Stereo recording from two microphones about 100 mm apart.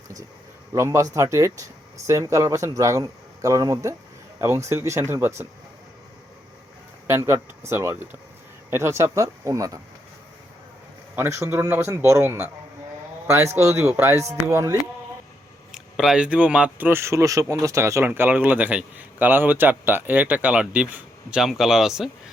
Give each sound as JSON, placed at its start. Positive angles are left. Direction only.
{"t": 0.7, "sound": "a man's voice", "side_deg": -30}
{"t": 7.1, "sound": "a man's voice", "side_deg": -30}
{"t": 11.1, "sound": "a man's voice", "side_deg": -25}
{"t": 15.7, "sound": "speech", "side_deg": -5}